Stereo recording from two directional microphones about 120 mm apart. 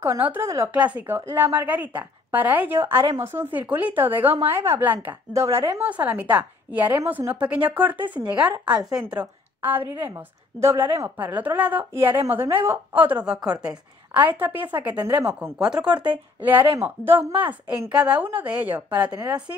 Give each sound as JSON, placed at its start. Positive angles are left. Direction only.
{"t": 0.0, "sound": "a woman's voice", "side_deg": -20}
{"t": 15.6, "sound": "a woman's voice", "side_deg": -10}